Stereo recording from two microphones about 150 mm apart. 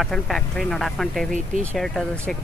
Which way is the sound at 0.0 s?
Centre (ahead or behind).